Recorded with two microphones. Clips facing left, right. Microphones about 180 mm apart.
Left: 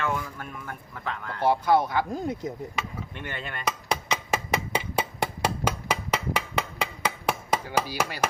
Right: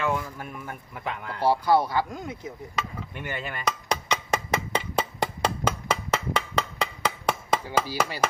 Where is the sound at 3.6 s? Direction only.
10° left (ahead or behind).